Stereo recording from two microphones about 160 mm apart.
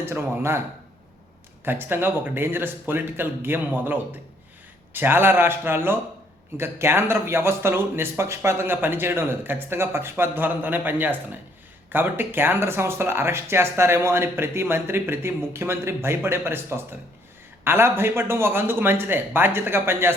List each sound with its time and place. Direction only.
0.0 s speech: 15° right (ahead or behind)
1.6 s speech: 15° right (ahead or behind)